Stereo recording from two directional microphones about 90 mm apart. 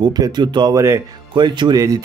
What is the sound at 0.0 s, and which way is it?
Speech, 50° right (ahead or behind).